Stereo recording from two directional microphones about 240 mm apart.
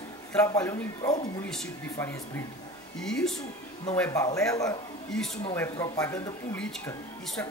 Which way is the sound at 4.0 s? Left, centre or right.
Centre.